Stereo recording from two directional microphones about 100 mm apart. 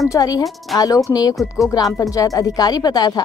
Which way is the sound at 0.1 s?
35° left (ahead or behind).